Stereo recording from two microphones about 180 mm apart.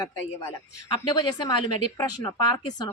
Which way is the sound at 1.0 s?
25° left (ahead or behind).